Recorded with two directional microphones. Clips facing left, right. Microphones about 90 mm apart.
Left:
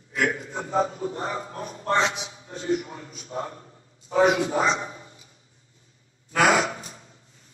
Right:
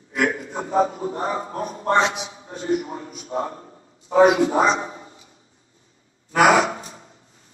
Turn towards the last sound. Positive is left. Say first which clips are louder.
# right 5 dB
turn(degrees=-30)  # may be behind; listen again after turning